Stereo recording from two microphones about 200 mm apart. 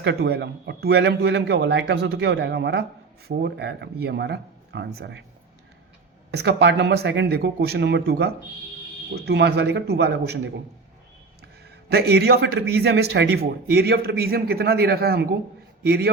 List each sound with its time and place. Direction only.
0.0 s a man's voice: 55° right (ahead or behind)
6.3 s a man's voice: 55° right (ahead or behind)
11.9 s a man's voice: 55° right (ahead or behind)